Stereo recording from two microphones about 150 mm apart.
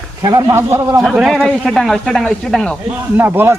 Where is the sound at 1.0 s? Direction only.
Centre (ahead or behind).